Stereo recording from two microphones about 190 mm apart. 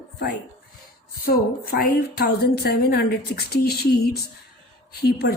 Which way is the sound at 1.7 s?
55° left (ahead or behind).